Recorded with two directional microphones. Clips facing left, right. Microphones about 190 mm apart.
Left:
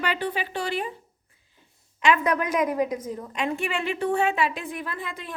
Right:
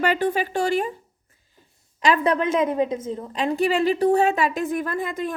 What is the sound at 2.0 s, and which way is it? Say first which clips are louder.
A woman's voice: right 2 dB; 35° right (ahead or behind).